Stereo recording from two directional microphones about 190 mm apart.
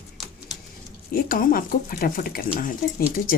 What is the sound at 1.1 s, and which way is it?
Speech, 50° left (ahead or behind).